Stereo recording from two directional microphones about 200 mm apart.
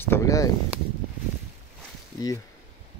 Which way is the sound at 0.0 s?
15° left (ahead or behind).